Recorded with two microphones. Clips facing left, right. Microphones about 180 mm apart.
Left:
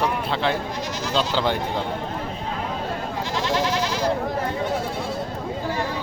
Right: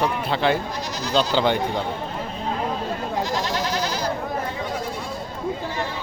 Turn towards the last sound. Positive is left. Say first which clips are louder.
# left 2 dB
turn(degrees=-40)  # may be behind; listen again after turning